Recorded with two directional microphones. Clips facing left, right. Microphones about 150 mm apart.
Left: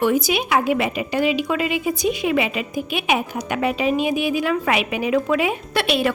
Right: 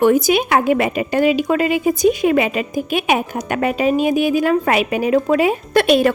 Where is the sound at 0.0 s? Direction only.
50° right (ahead or behind).